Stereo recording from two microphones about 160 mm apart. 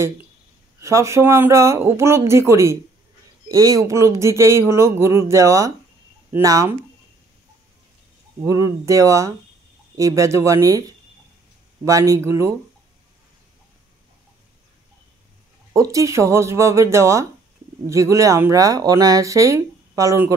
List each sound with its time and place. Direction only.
0.7 s speech: 20° right (ahead or behind)
8.4 s speech: 20° right (ahead or behind)
11.8 s speech: 20° right (ahead or behind)
15.7 s speech: 20° right (ahead or behind)